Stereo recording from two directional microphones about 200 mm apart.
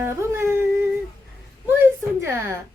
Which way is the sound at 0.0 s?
15° right (ahead or behind).